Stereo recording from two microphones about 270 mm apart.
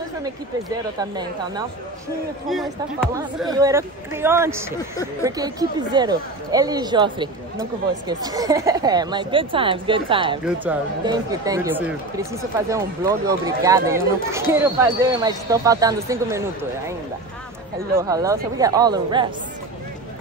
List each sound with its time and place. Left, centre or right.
0.2 s speech: centre
2.5 s speech: centre
3.4 s speech: centre
10.4 s speech: centre
17.9 s speech: centre